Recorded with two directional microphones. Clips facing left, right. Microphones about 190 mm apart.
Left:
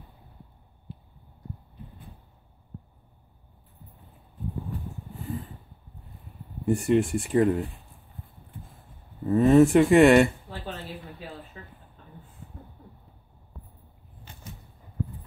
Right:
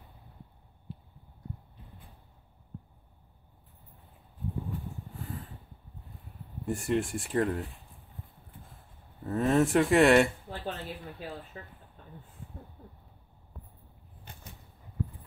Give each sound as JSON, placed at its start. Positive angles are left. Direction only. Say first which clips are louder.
{"t": 6.6, "sound": "speech", "louder": "left 7 dB", "side_deg": 0}
{"t": 9.3, "sound": "speech", "louder": "left 8 dB", "side_deg": 0}